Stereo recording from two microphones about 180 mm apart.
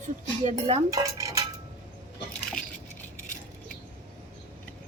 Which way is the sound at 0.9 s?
20° right (ahead or behind).